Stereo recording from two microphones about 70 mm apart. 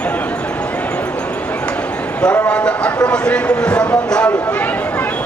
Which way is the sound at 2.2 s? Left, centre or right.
Centre.